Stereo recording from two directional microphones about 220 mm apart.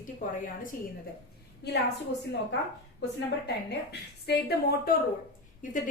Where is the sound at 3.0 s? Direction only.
50° left (ahead or behind).